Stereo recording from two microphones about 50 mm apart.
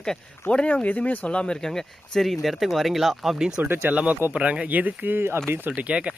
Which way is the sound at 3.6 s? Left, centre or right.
Right.